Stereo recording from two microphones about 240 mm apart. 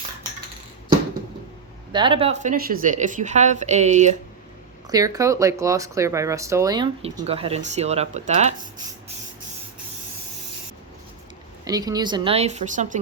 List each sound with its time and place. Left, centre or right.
1.9 s speech: centre
4.9 s speech: centre
11.6 s speech: centre; by 13.0 s right